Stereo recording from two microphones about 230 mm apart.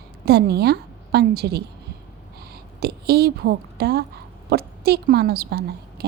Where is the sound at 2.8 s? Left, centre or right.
Right.